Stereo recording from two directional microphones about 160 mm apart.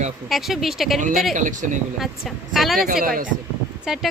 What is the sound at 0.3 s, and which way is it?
Speech, centre (ahead or behind).